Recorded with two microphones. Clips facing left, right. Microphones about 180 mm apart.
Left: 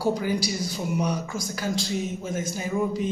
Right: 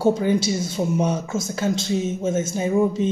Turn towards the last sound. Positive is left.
turn(degrees=-25)  # may be behind; listen again after turning